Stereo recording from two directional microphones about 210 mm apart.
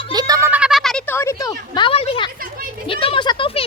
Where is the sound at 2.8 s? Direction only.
25° left (ahead or behind).